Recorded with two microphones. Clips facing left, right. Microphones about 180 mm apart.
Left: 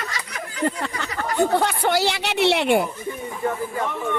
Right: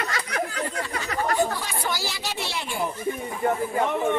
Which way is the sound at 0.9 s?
65° left (ahead or behind).